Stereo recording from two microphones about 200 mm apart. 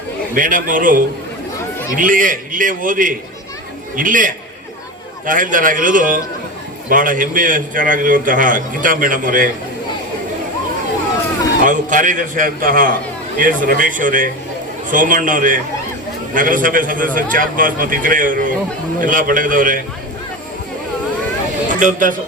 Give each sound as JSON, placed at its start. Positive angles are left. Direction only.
{"t": 0.3, "sound": "a man's voice", "side_deg": -40}
{"t": 2.0, "sound": "a man's voice", "side_deg": -40}
{"t": 11.6, "sound": "a man's voice", "side_deg": -40}
{"t": 21.7, "sound": "speech", "side_deg": -40}